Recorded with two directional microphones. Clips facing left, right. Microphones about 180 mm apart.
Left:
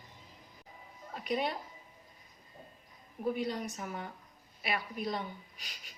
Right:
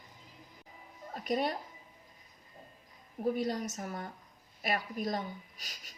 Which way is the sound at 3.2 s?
40° right (ahead or behind).